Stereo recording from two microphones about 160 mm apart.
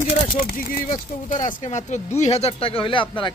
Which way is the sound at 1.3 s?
55° left (ahead or behind).